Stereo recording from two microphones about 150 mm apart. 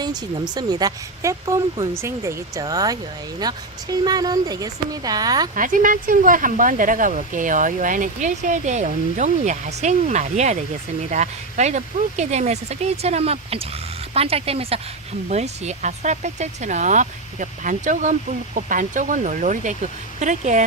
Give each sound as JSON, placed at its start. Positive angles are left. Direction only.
{"t": 0.0, "sound": "speech", "side_deg": -25}
{"t": 5.5, "sound": "speech", "side_deg": -65}